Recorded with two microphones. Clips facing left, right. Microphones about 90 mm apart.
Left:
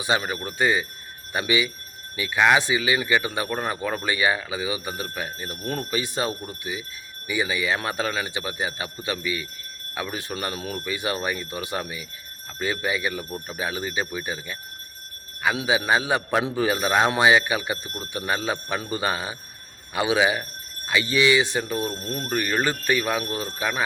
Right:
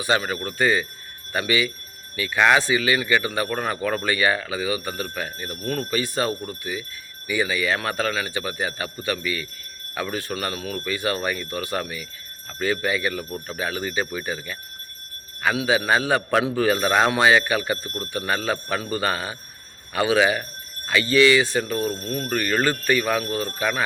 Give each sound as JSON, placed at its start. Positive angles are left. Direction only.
{"t": 0.0, "sound": "speech", "side_deg": 20}
{"t": 15.5, "sound": "speech", "side_deg": 20}